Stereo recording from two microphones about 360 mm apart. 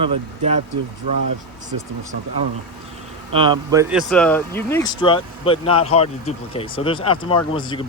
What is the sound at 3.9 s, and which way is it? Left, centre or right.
Speech, centre.